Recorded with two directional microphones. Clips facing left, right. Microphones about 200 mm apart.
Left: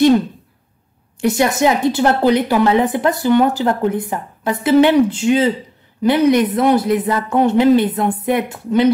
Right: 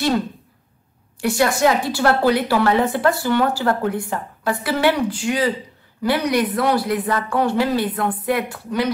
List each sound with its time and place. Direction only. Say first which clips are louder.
1.2 s a woman's voice: left 3 dB; 20° left (ahead or behind)